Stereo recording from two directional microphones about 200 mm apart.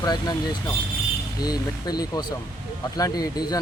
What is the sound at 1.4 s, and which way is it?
Speech, 20° left (ahead or behind).